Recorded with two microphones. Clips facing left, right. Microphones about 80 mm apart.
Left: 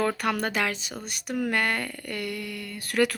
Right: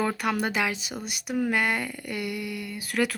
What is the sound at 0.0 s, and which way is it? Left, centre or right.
Speech, centre.